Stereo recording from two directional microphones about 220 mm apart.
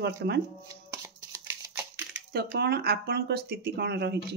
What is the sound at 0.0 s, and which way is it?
Speech, 50° right (ahead or behind).